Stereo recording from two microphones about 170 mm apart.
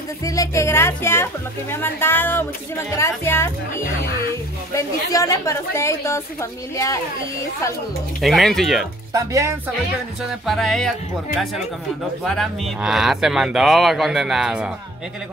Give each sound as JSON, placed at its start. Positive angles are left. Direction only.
{"t": 0.2, "sound": "speech", "side_deg": 20}
{"t": 4.7, "sound": "speech", "side_deg": 20}
{"t": 8.2, "sound": "speech", "side_deg": 0}
{"t": 9.1, "sound": "speech", "side_deg": -20}
{"t": 10.4, "sound": "speech", "side_deg": 0}
{"t": 12.3, "sound": "speech", "side_deg": 0}